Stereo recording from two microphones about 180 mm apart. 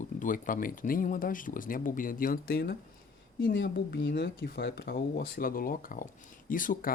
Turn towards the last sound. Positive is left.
turn(degrees=50)  # may be behind; listen again after turning